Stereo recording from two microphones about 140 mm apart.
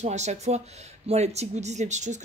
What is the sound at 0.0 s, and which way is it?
A woman's voice, 55° right (ahead or behind).